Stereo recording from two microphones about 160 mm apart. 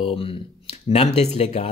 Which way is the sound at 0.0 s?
35° left (ahead or behind).